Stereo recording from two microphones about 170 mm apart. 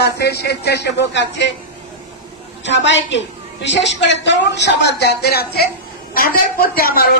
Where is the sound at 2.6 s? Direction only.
90° left.